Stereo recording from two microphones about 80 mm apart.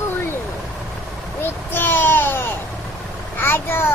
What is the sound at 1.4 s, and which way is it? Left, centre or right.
A child's voice, left.